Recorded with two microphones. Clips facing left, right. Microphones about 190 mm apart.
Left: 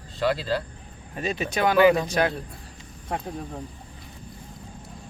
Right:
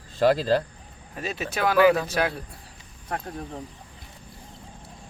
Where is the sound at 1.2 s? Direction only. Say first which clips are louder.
Left 2 dB; 5° right (ahead or behind).